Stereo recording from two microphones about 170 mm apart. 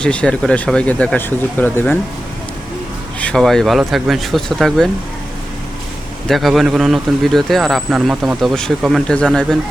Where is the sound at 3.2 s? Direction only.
5° left (ahead or behind).